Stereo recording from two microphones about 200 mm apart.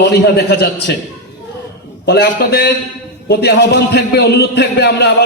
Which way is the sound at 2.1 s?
55° left (ahead or behind).